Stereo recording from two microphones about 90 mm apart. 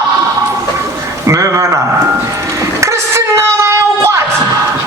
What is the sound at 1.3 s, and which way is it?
Speech, 35° right (ahead or behind).